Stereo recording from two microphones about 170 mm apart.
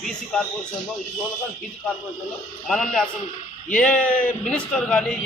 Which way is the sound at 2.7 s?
Centre (ahead or behind).